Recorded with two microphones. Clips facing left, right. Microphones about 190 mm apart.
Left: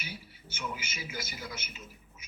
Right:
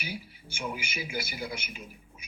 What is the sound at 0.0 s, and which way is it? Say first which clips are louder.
Speech: right 6 dB; 10° right (ahead or behind).